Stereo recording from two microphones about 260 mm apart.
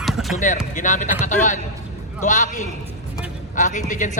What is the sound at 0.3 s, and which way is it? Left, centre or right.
A man's voice, left.